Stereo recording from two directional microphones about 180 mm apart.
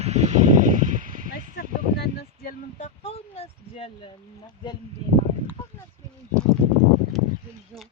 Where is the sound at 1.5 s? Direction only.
60° left (ahead or behind); by 3.9 s 35° left (ahead or behind).